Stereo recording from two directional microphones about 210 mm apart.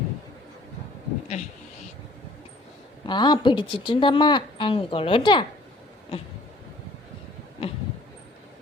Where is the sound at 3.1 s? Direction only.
20° left (ahead or behind).